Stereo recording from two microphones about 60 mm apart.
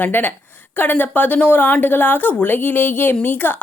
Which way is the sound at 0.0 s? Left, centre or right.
Left.